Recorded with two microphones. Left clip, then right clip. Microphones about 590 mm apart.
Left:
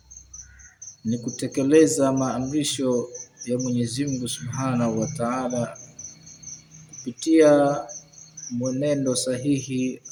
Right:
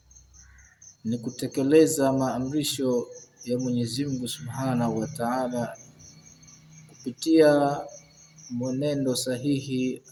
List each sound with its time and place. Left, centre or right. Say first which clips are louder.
1.1 s speech: left 3 dB; right
7.2 s speech: left 3 dB; right
8.8 s speech: left 3 dB; right